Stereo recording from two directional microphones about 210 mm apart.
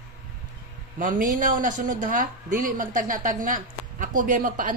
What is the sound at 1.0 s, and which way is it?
A woman's voice, 40° right (ahead or behind).